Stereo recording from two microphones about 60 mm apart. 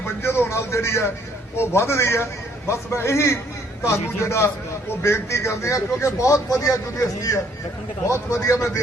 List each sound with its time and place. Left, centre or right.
0.0 s music: left
1.5 s a man's voice: left
8.1 s speech: left